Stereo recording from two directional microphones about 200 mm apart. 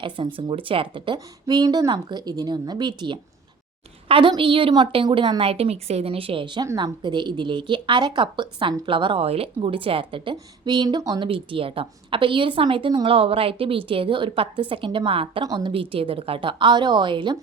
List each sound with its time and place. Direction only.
0.3 s a woman's voice: 25° right (ahead or behind)